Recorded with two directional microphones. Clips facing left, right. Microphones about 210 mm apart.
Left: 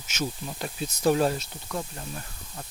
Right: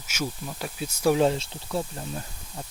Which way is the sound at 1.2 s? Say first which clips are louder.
Right 3 dB; 25° right (ahead or behind).